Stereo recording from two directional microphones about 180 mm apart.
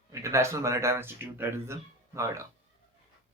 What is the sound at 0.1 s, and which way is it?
Speech, 15° right (ahead or behind).